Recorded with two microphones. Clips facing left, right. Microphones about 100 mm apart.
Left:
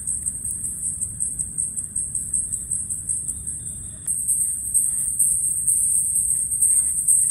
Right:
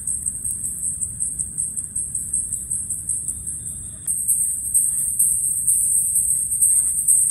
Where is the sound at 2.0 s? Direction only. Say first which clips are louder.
Even; 20° left (ahead or behind).